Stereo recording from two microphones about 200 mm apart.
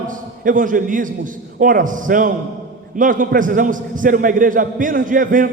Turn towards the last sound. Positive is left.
turn(degrees=-40)  # may be behind; listen again after turning